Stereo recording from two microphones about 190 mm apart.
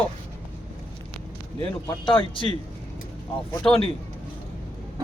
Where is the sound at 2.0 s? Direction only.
25° left (ahead or behind).